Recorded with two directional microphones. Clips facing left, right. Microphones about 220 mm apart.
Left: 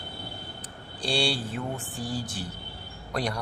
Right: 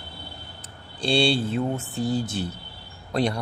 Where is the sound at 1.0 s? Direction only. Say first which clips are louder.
Right 6 dB; 25° right (ahead or behind).